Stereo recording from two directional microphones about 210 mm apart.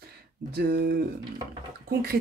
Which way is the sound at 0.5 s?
45° right (ahead or behind).